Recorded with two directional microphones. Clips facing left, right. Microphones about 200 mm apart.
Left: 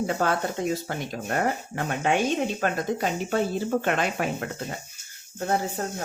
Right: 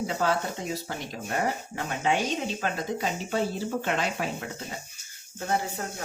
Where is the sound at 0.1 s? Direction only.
55° left (ahead or behind).